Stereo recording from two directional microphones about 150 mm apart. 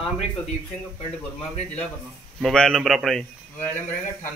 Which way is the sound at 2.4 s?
5° left (ahead or behind).